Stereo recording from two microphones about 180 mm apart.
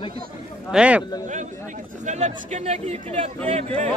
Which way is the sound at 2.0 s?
40° right (ahead or behind).